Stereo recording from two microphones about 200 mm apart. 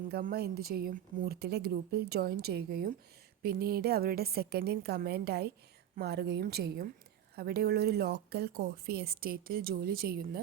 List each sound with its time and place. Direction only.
0.1 s a woman's voice: 50° right (ahead or behind)